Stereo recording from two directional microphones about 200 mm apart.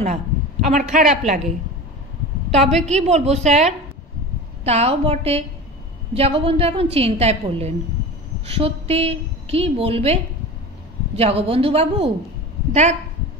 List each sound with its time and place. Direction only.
0.0 s a sound: 35° right (ahead or behind)
0.9 s a woman's voice: 35° right (ahead or behind)
2.7 s a woman's voice: 35° right (ahead or behind)